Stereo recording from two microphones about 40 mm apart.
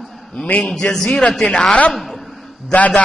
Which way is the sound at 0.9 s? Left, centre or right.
Centre.